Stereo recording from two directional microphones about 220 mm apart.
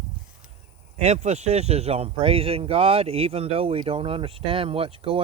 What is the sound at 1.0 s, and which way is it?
A man's voice, 30° right (ahead or behind).